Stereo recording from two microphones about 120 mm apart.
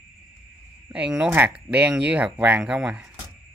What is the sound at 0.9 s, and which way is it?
Speech, 10° right (ahead or behind).